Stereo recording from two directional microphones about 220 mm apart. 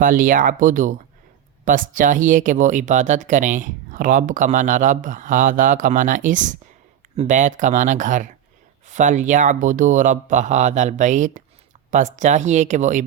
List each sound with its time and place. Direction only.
0.0 s speech: 40° right (ahead or behind)